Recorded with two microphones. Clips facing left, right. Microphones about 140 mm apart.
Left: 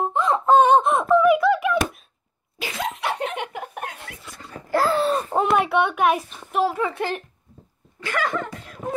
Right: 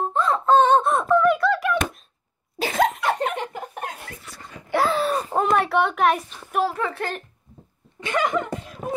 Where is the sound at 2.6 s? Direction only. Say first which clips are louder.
Right 8 dB; 45° right (ahead or behind).